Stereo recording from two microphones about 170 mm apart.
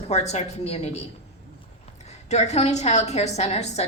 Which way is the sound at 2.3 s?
40° left (ahead or behind).